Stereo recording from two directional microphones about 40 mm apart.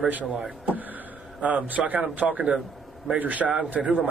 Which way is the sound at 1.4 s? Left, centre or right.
Right.